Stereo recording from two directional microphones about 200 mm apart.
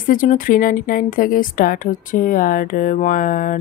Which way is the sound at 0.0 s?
45° left (ahead or behind).